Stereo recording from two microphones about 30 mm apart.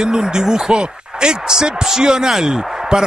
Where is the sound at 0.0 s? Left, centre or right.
Right.